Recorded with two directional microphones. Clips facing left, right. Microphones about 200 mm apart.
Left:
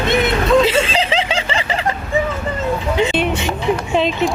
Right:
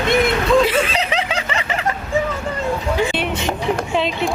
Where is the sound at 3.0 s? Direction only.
20° left (ahead or behind).